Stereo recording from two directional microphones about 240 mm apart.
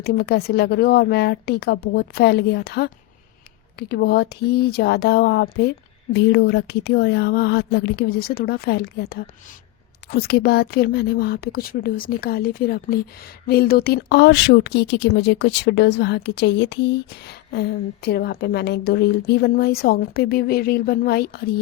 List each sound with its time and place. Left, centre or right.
0.0 s speech: left